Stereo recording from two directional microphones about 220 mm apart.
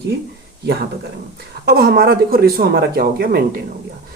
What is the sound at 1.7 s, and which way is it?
Speech, 45° right (ahead or behind).